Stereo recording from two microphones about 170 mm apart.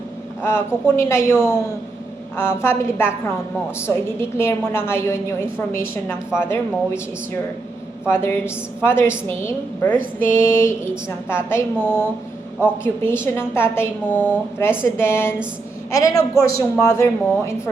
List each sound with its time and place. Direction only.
0.4 s a woman's voice: 15° left (ahead or behind)
8.0 s a woman's voice: 15° left (ahead or behind)